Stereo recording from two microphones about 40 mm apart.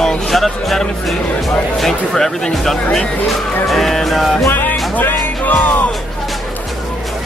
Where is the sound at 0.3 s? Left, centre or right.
Centre.